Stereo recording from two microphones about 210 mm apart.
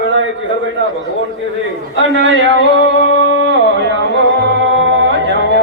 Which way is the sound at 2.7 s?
60° right (ahead or behind).